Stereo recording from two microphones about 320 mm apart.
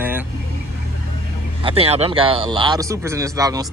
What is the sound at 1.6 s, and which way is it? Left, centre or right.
Speech, centre.